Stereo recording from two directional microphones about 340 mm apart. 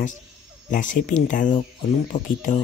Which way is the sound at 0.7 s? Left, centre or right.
Left.